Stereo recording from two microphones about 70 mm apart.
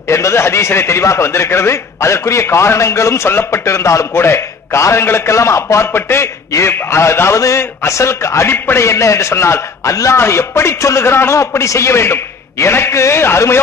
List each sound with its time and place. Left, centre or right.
0.1 s a man's voice: left